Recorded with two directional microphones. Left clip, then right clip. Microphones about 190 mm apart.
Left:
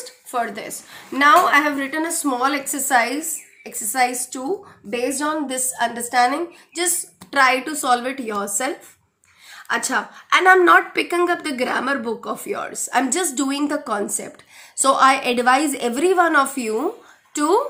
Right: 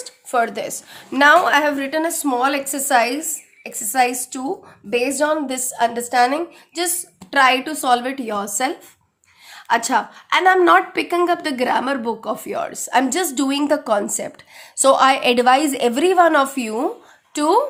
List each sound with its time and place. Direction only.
0.0 s a woman's voice: 55° right (ahead or behind); by 17.6 s 35° right (ahead or behind)